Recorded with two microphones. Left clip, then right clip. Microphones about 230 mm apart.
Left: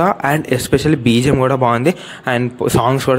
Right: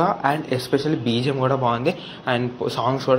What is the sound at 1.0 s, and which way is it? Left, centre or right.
Speech, left.